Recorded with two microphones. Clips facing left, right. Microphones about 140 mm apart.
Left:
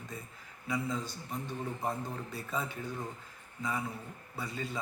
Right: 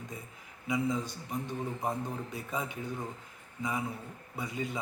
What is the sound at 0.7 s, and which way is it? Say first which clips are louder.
A man's voice: right 4 dB; 15° right (ahead or behind).